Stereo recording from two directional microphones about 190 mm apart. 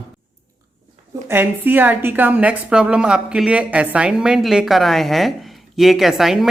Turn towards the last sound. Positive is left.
turn(degrees=0)  # may be behind; listen again after turning